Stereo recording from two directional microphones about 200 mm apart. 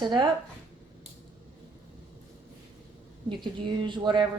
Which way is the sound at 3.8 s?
25° right (ahead or behind).